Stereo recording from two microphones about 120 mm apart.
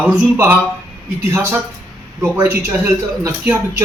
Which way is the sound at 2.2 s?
20° right (ahead or behind).